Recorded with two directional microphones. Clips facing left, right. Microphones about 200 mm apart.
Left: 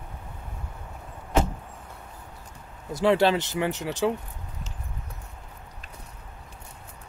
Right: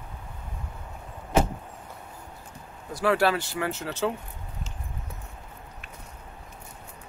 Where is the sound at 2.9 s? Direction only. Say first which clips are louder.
Left 3 dB; 20° left (ahead or behind).